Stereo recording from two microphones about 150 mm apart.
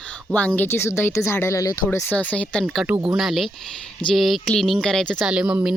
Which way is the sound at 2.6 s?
5° right (ahead or behind).